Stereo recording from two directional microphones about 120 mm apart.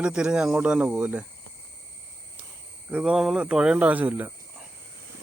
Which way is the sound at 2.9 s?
5° right (ahead or behind).